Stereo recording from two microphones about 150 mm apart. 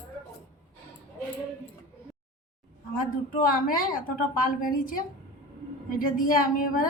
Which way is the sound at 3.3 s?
70° left (ahead or behind).